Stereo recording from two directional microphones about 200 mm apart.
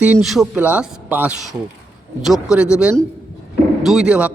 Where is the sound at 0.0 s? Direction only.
5° right (ahead or behind).